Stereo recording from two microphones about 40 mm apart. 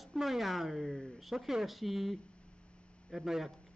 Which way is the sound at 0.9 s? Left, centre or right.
Centre.